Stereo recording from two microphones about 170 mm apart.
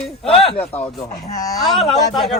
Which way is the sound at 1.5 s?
Centre (ahead or behind).